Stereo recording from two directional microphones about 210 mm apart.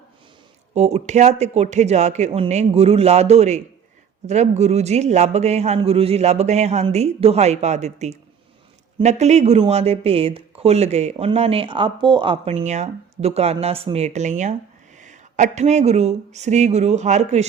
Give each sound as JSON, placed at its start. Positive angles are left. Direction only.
{"t": 0.7, "sound": "a man's voice", "side_deg": -30}